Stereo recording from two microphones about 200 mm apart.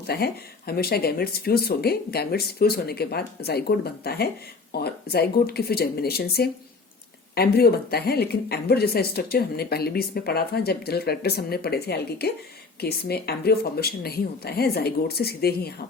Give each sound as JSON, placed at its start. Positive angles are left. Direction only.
{"t": 0.1, "sound": "speech", "side_deg": 55}